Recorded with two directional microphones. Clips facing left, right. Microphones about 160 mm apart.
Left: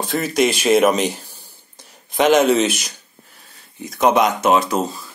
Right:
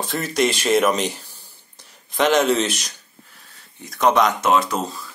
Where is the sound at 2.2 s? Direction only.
10° left (ahead or behind).